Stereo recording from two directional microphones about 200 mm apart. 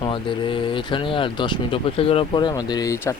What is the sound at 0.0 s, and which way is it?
Speech, 25° left (ahead or behind).